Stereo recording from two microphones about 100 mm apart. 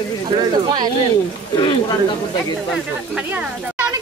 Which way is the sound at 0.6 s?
40° right (ahead or behind).